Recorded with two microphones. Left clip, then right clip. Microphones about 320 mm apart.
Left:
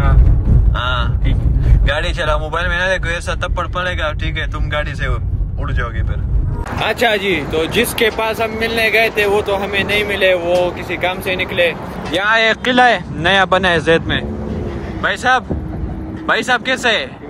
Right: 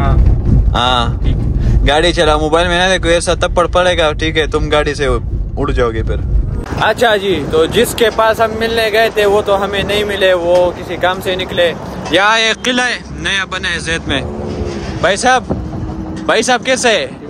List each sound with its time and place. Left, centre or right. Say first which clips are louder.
0.7 s a sound: right 7 dB; centre
1.9 s speech: right 7 dB; centre
6.8 s speech: right 4 dB; centre
15.0 s speech: right 4 dB; centre